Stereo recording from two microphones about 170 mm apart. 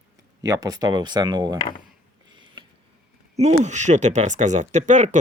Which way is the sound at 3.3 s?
40° right (ahead or behind).